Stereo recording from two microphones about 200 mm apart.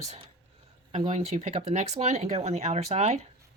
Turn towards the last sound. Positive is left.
turn(degrees=-35)  # may be behind; listen again after turning